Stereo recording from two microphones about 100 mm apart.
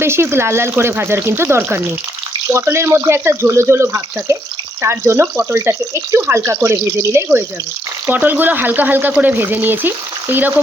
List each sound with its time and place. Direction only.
0.0 s speech: 25° right (ahead or behind)